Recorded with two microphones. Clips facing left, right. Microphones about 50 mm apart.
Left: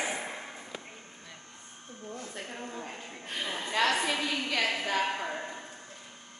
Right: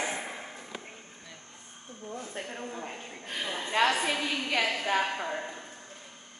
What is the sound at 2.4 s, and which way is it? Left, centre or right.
Speech, centre.